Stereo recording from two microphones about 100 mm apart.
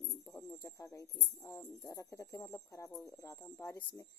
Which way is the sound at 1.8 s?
30° left (ahead or behind).